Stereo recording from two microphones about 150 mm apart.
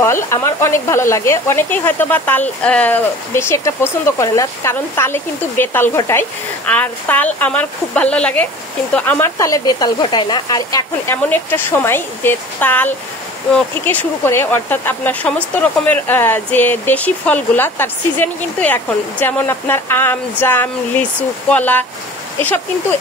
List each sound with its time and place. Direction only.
0.0 s speech: 20° left (ahead or behind)
9.2 s speech: 25° left (ahead or behind)
11.2 s speech: 15° left (ahead or behind)